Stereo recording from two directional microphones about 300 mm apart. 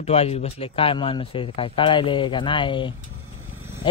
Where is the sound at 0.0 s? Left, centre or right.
Left.